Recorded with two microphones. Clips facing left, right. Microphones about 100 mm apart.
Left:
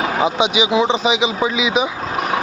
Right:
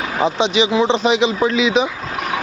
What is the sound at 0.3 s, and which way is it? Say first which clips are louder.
A man's voice: right 2 dB; 10° left (ahead or behind).